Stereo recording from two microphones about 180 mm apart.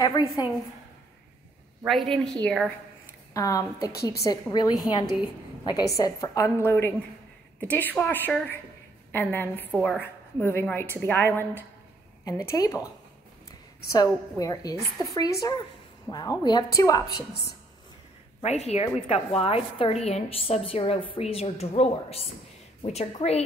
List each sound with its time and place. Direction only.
0.0 s a woman's voice: 20° left (ahead or behind)
1.9 s a woman's voice: centre (ahead or behind)
3.3 s a woman's voice: 20° left (ahead or behind)
17.3 s speech: 65° left (ahead or behind)
18.4 s a woman's voice: 40° left (ahead or behind)